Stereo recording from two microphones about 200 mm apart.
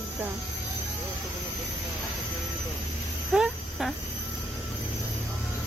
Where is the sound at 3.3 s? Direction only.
Centre (ahead or behind).